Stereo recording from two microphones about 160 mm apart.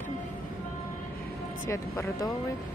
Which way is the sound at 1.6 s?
20° left (ahead or behind).